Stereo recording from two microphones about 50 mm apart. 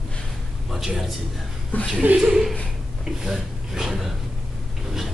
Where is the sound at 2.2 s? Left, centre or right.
Centre.